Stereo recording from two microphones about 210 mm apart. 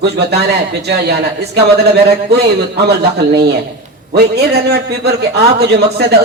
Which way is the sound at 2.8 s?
50° right (ahead or behind).